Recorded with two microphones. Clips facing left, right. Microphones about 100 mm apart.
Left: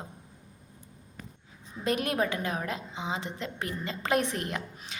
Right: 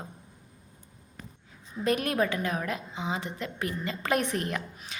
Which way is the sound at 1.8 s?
20° left (ahead or behind).